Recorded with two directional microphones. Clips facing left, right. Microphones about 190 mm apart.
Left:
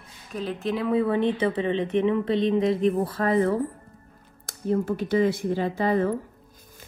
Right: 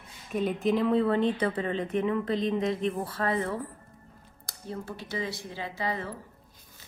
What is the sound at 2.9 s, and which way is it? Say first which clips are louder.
Speech: left 6 dB; 35° left (ahead or behind).